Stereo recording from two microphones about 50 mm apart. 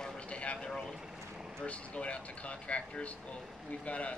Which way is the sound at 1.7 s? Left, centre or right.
Left.